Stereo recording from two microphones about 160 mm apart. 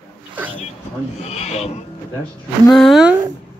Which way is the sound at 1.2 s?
40° left (ahead or behind).